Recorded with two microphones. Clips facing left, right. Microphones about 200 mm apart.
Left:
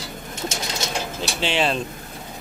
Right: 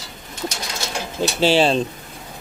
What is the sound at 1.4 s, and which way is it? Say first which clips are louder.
Speech: right 7 dB; 35° right (ahead or behind).